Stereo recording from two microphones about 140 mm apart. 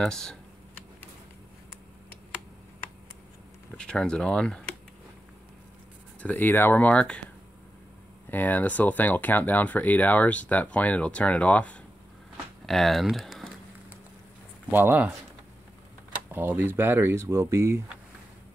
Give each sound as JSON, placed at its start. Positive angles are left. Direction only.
{"t": 0.0, "sound": "speech", "side_deg": 5}
{"t": 3.7, "sound": "speech", "side_deg": 5}
{"t": 6.2, "sound": "speech", "side_deg": 15}
{"t": 8.3, "sound": "speech", "side_deg": 10}
{"t": 14.7, "sound": "speech", "side_deg": -15}
{"t": 16.3, "sound": "speech", "side_deg": -15}